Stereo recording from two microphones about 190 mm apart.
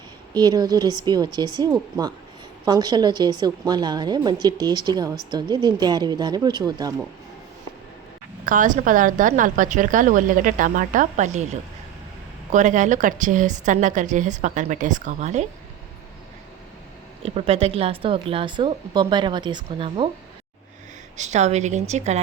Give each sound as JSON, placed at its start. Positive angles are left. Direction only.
{"t": 0.3, "sound": "a woman's voice", "side_deg": -20}
{"t": 8.4, "sound": "a woman's voice", "side_deg": -40}
{"t": 12.5, "sound": "a woman's voice", "side_deg": -40}
{"t": 17.2, "sound": "a woman's voice", "side_deg": -30}
{"t": 21.2, "sound": "a woman's voice", "side_deg": -35}